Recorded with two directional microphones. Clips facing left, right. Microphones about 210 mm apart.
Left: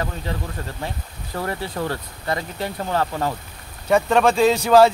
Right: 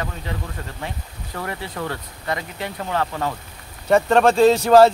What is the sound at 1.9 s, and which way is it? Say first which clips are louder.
Speech: left 2 dB; 35° left (ahead or behind).